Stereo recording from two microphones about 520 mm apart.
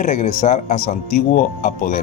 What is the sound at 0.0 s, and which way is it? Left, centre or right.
Speech, centre.